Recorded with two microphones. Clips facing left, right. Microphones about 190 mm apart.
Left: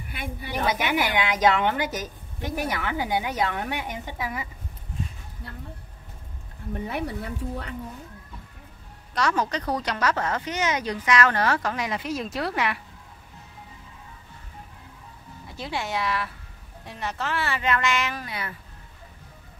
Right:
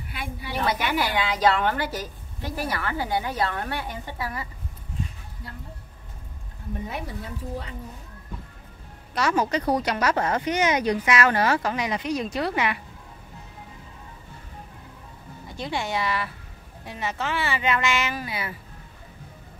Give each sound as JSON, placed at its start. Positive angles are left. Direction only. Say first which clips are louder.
{"t": 0.1, "sound": "a sound", "louder": "left 1 dB", "side_deg": 50}
{"t": 0.5, "sound": "a woman's voice", "louder": "even", "side_deg": 20}
{"t": 6.9, "sound": "speech", "louder": "left 3 dB", "side_deg": 65}
{"t": 9.1, "sound": "speech", "louder": "right 2 dB", "side_deg": -5}
{"t": 15.4, "sound": "speech", "louder": "right 2 dB", "side_deg": 0}